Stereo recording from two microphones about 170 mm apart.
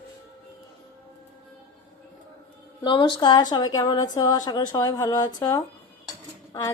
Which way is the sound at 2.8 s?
25° left (ahead or behind).